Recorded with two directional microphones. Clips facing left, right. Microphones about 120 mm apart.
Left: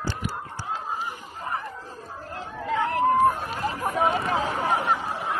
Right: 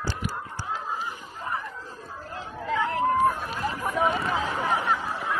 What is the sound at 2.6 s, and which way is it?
Chatter, 20° left (ahead or behind).